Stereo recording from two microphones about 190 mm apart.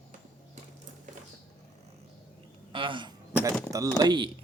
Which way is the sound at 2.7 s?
25° right (ahead or behind).